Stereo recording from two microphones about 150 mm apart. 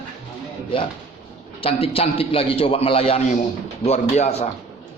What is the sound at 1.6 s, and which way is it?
A man's voice, 40° left (ahead or behind).